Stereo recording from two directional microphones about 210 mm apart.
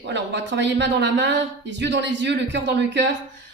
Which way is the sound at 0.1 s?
55° right (ahead or behind).